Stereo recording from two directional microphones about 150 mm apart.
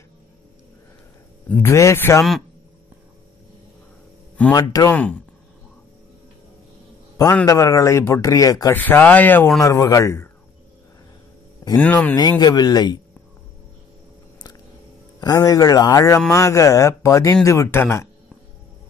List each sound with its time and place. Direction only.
1.5 s speech: 20° left (ahead or behind)
4.6 s speech: 25° left (ahead or behind)
4.9 s speech: 10° left (ahead or behind)
7.4 s speech: 20° left (ahead or behind)
8.7 s speech: 10° left (ahead or behind)
11.7 s speech: 10° left (ahead or behind)
12.2 s speech: 25° left (ahead or behind)
15.1 s speech: 25° left (ahead or behind)